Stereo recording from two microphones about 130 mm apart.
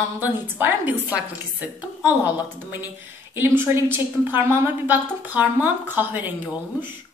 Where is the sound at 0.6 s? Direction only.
15° right (ahead or behind).